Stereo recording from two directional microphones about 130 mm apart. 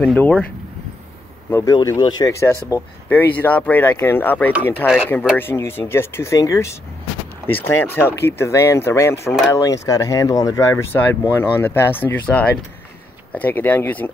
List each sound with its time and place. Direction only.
0.0 s speech: 10° left (ahead or behind)
1.5 s speech: 30° left (ahead or behind)
3.1 s speech: 15° left (ahead or behind)